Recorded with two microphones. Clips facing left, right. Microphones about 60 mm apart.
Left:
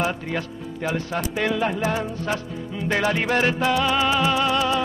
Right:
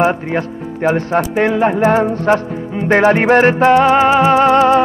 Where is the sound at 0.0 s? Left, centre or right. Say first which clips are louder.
Right 10 dB; right.